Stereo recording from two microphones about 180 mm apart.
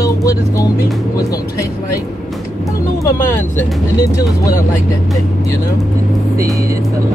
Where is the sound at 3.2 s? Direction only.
15° left (ahead or behind).